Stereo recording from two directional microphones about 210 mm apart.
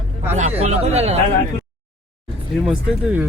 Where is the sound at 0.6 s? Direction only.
30° right (ahead or behind).